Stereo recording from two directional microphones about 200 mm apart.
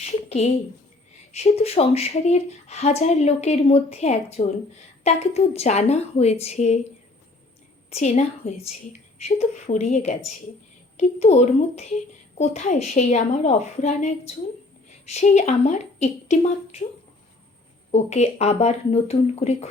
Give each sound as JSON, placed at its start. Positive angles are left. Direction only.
{"t": 0.0, "sound": "a sound", "side_deg": 30}
{"t": 1.3, "sound": "speech", "side_deg": 30}
{"t": 7.9, "sound": "a woman's voice", "side_deg": 35}
{"t": 17.9, "sound": "speech", "side_deg": 30}